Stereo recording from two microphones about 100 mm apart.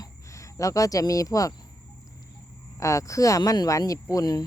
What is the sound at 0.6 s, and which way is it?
Speech, 35° left (ahead or behind).